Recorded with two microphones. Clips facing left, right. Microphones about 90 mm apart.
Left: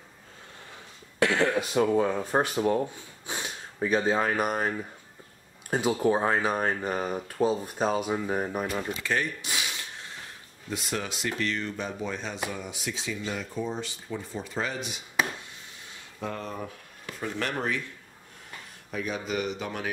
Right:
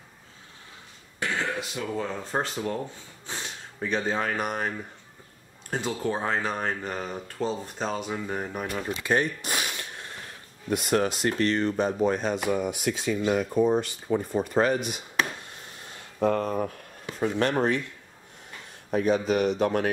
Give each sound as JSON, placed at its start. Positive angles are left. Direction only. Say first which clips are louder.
{"t": 1.2, "sound": "a sound", "louder": "left 6 dB", "side_deg": 75}
{"t": 1.6, "sound": "speech", "louder": "left 8 dB", "side_deg": 45}
{"t": 2.0, "sound": "speech", "louder": "left 5 dB", "side_deg": 15}
{"t": 8.8, "sound": "speech", "louder": "right 4 dB", "side_deg": -20}
{"t": 9.4, "sound": "a sound", "louder": "right 3 dB", "side_deg": -50}
{"t": 10.7, "sound": "speech", "louder": "right 8 dB", "side_deg": -50}
{"t": 15.9, "sound": "a sound", "louder": "right 11 dB", "side_deg": -50}
{"t": 17.0, "sound": "speech", "louder": "right 7 dB", "side_deg": -25}
{"t": 18.9, "sound": "speech", "louder": "right 8 dB", "side_deg": -45}